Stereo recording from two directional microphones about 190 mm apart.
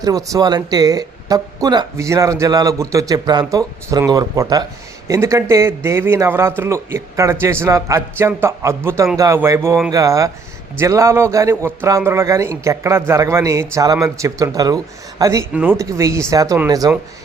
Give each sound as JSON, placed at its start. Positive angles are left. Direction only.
{"t": 0.0, "sound": "a man's voice", "side_deg": -20}